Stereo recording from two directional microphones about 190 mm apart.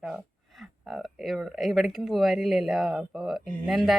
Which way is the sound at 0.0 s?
Centre (ahead or behind).